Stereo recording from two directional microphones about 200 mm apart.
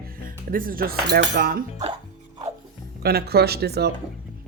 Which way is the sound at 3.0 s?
50° right (ahead or behind).